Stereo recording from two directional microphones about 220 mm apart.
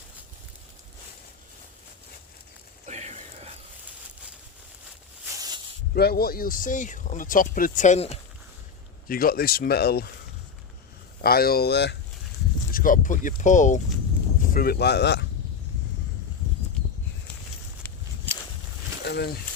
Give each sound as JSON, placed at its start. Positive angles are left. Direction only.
{"t": 2.8, "sound": "a sound", "side_deg": -30}
{"t": 5.3, "sound": "a sound", "side_deg": -15}
{"t": 5.9, "sound": "speech", "side_deg": 45}
{"t": 9.0, "sound": "speech", "side_deg": 40}
{"t": 11.2, "sound": "speech", "side_deg": 45}
{"t": 12.7, "sound": "speech", "side_deg": 40}
{"t": 19.0, "sound": "speech", "side_deg": 45}